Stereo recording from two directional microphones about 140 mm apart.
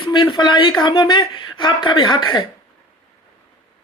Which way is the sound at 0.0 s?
35° left (ahead or behind).